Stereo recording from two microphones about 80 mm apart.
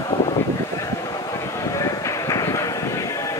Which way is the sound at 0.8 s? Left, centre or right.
Left.